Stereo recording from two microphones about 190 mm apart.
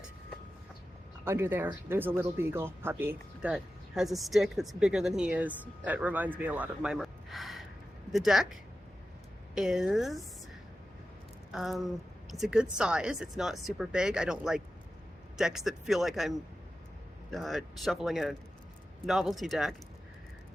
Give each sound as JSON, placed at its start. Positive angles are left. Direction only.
{"t": 1.2, "sound": "speech", "side_deg": -10}
{"t": 9.6, "sound": "speech", "side_deg": -5}
{"t": 11.5, "sound": "speech", "side_deg": 0}
{"t": 17.3, "sound": "speech", "side_deg": 0}